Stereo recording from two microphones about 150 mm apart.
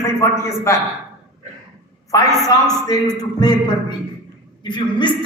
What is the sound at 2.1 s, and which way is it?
A man's voice, 25° left (ahead or behind).